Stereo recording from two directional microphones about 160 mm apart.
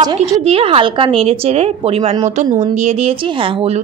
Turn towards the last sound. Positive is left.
turn(degrees=-35)  # may be behind; listen again after turning